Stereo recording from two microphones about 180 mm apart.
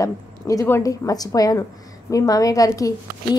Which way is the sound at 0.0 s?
20° left (ahead or behind).